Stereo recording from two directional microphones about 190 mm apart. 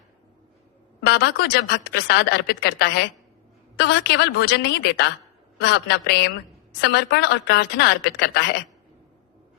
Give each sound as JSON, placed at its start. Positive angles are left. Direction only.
{"t": 1.0, "sound": "a woman's voice", "side_deg": 60}